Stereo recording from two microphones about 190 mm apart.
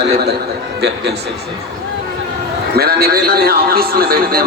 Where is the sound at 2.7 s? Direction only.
55° right (ahead or behind).